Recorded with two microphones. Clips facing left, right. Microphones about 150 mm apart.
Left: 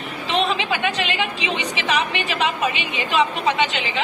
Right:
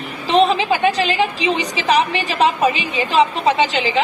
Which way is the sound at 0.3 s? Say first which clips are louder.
Right 7 dB; 35° right (ahead or behind).